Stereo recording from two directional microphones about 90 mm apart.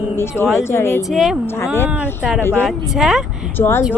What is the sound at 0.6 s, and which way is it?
Speech, 30° left (ahead or behind).